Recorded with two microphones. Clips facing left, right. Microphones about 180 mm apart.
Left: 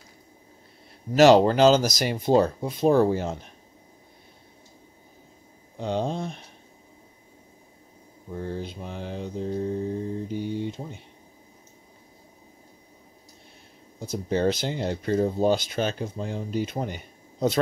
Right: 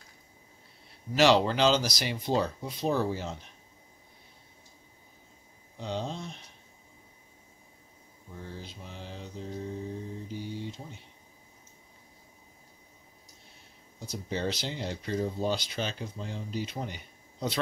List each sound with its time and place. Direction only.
1.1 s speech: 45° left (ahead or behind)
5.8 s mantra: 55° left (ahead or behind)
8.3 s mantra: 60° left (ahead or behind)
14.0 s speech: 50° left (ahead or behind)